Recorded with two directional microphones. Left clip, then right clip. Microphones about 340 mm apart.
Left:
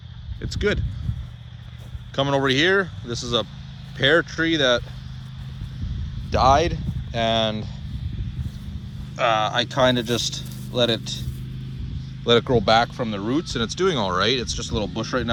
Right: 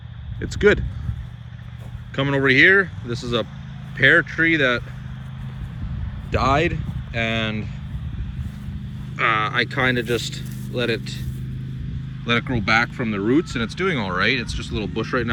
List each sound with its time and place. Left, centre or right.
0.4 s speech: centre
2.1 s speech: centre
6.3 s speech: centre
9.1 s speech: centre